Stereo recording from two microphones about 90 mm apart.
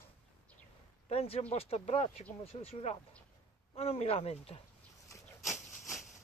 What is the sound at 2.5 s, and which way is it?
Speech, 90° left.